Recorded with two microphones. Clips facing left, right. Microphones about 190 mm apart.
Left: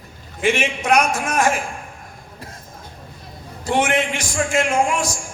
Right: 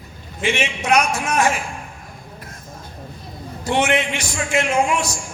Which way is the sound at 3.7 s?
50° left (ahead or behind).